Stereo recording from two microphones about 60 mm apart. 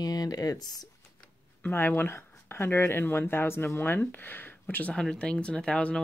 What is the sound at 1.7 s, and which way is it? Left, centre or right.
Speech, left.